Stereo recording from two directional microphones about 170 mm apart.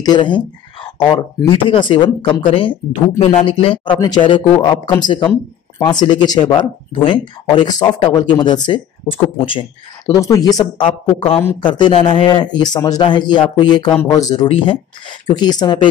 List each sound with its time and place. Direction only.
0.0 s speech: 25° left (ahead or behind)
1.7 s speech: 30° left (ahead or behind)
10.2 s speech: 20° left (ahead or behind)